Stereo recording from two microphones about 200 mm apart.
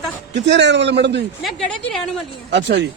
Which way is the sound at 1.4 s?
Centre (ahead or behind).